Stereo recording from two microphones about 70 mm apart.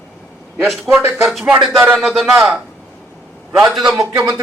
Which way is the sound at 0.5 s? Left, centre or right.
Centre.